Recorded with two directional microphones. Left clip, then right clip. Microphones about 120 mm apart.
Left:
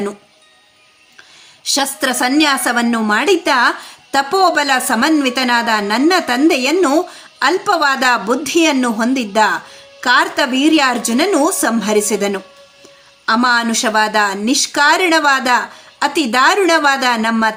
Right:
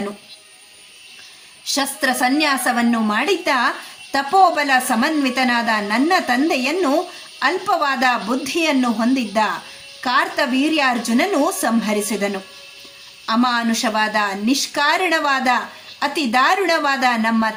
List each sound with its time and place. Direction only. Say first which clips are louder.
1.6 s a woman's voice: left 3 dB; 30° left (ahead or behind)